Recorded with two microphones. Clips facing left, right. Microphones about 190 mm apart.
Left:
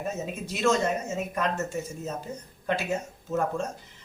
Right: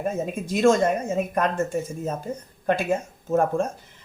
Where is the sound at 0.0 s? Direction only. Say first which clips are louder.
Right 5 dB; 50° right (ahead or behind).